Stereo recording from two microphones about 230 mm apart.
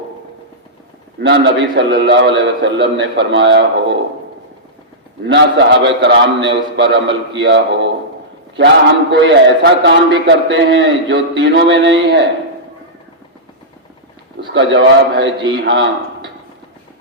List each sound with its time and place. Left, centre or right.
1.2 s a man's voice: right
5.2 s a man's voice: right
14.5 s a man's voice: right